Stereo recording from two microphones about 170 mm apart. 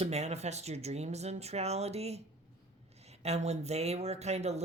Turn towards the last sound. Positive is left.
turn(degrees=-40)  # may be behind; listen again after turning